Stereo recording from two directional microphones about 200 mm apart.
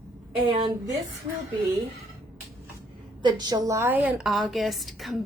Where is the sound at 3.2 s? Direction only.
20° right (ahead or behind).